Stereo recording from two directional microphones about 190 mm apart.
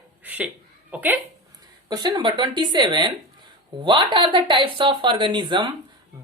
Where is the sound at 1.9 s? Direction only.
20° right (ahead or behind).